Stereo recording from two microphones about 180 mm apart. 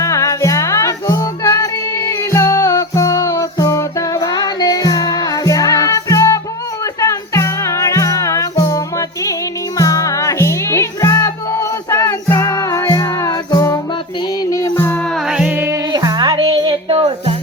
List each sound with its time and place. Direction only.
0.0 s music: 15° left (ahead or behind)
15.3 s music: 5° right (ahead or behind); by 17.3 s 30° right (ahead or behind)